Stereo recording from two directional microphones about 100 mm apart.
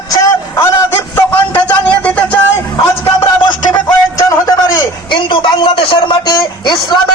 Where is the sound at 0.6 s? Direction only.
20° left (ahead or behind).